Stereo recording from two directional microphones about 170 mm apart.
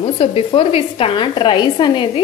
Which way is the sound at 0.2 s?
35° left (ahead or behind).